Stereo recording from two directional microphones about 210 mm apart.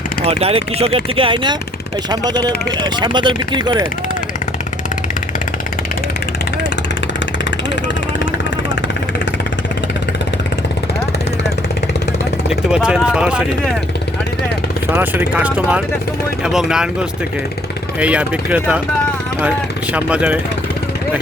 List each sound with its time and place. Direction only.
0.3 s speech: 30° right (ahead or behind)
12.5 s speech: 5° right (ahead or behind)
15.4 s speech: 5° right (ahead or behind)
18.0 s speech: 5° right (ahead or behind)